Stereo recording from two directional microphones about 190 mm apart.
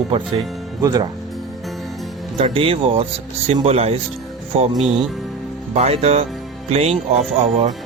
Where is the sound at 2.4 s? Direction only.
30° right (ahead or behind).